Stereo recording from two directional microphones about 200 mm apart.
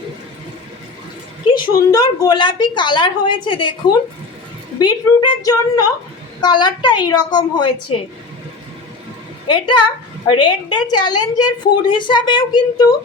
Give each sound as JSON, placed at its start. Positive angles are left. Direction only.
{"t": 1.5, "sound": "a woman's voice", "side_deg": 20}
{"t": 4.8, "sound": "a woman's voice", "side_deg": 20}
{"t": 9.5, "sound": "a woman's voice", "side_deg": 25}